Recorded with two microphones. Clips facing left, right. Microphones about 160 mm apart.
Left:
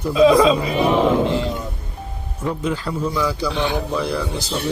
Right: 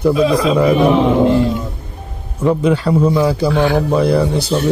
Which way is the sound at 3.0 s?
55° right (ahead or behind).